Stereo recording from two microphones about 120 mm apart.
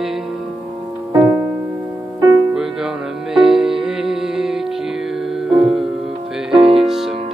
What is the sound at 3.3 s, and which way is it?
Music, 5° right (ahead or behind).